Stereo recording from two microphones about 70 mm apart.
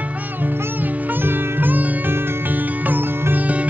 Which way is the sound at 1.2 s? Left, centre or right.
Right.